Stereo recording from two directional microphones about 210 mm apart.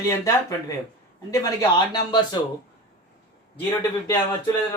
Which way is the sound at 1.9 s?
20° left (ahead or behind).